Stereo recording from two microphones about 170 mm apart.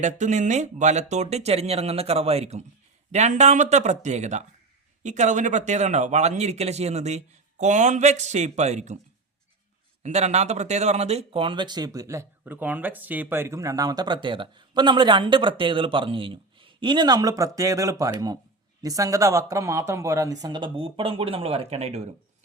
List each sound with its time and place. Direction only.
0.0 s speech: 45° right (ahead or behind)
10.0 s speech: 40° right (ahead or behind)